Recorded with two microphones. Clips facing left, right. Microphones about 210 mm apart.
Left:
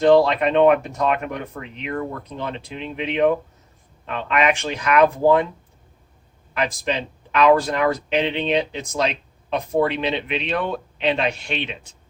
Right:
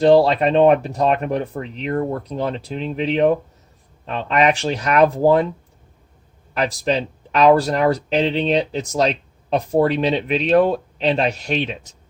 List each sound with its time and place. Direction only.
0.0 s speech: 35° right (ahead or behind)
6.5 s speech: 35° right (ahead or behind)